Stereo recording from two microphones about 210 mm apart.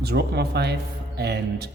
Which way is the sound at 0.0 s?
50° right (ahead or behind).